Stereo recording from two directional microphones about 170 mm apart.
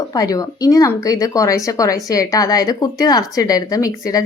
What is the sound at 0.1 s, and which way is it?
Speech, 20° left (ahead or behind).